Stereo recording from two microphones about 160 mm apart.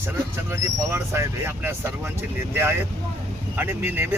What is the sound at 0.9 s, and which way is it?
Speech, 15° right (ahead or behind).